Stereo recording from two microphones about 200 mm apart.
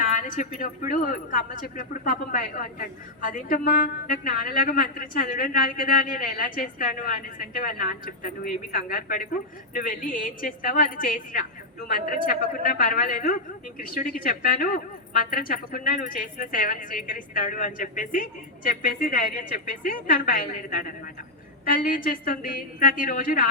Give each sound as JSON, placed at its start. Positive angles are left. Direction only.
{"t": 0.0, "sound": "speech", "side_deg": 40}